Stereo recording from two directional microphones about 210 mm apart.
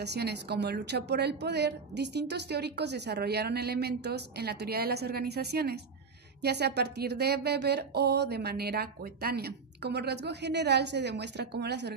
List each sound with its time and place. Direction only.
0.0 s a woman's voice: 55° right (ahead or behind)